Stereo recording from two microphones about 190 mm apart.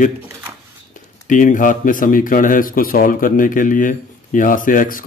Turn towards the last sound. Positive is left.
turn(degrees=45)  # may be behind; listen again after turning